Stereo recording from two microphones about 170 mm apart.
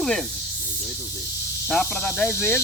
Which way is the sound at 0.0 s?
5° left (ahead or behind).